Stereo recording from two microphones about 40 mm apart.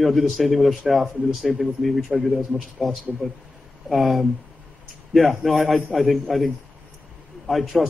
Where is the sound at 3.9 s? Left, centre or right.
Centre.